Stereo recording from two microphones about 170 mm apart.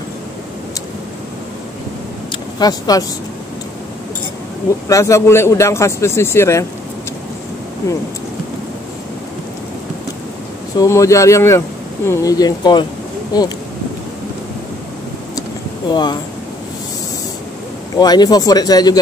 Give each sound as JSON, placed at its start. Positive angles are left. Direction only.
{"t": 2.6, "sound": "speech", "side_deg": 20}
{"t": 4.8, "sound": "speech", "side_deg": 20}
{"t": 10.8, "sound": "speech", "side_deg": 20}
{"t": 15.9, "sound": "speech", "side_deg": 25}
{"t": 17.9, "sound": "speech", "side_deg": 25}